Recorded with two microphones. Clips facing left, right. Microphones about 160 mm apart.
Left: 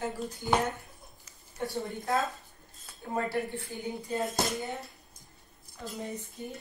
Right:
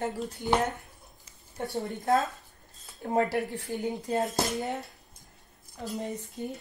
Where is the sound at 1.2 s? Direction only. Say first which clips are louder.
Even; 25° right (ahead or behind).